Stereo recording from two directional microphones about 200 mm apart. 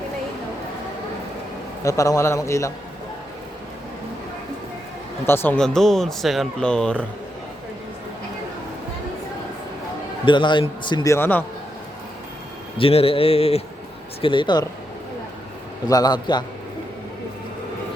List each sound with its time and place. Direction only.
1.8 s a man's voice: 15° left (ahead or behind)
5.2 s speech: 10° left (ahead or behind)
10.2 s a man's voice: 25° left (ahead or behind)
12.7 s a man's voice: 30° left (ahead or behind)
15.9 s a man's voice: 20° left (ahead or behind)